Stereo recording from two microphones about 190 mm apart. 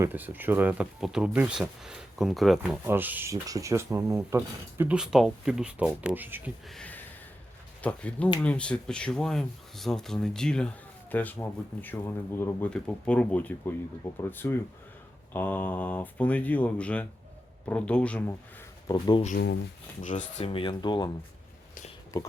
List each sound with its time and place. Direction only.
0.0 s speech: 10° right (ahead or behind)
2.8 s speech: 10° right (ahead or behind)
6.7 s a sound: 5° left (ahead or behind)
7.8 s speech: 5° left (ahead or behind)
18.9 s speech: 25° left (ahead or behind)
20.0 s speech: 40° left (ahead or behind)
20.5 s speech: 25° left (ahead or behind)